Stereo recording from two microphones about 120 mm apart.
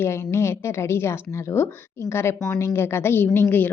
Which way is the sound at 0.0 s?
25° left (ahead or behind).